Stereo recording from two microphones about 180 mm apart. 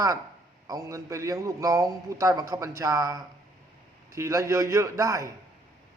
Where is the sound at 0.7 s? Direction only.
20° right (ahead or behind).